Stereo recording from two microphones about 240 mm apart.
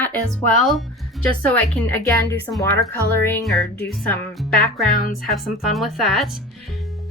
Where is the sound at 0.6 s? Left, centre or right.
Centre.